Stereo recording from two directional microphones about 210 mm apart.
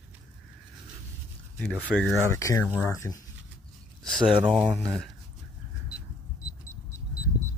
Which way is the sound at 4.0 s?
Centre (ahead or behind).